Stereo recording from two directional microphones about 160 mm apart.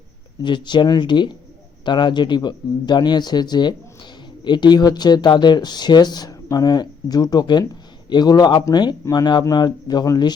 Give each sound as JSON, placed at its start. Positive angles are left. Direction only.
{"t": 0.4, "sound": "speech", "side_deg": 30}